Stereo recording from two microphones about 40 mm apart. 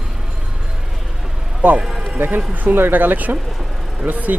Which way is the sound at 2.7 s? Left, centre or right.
Right.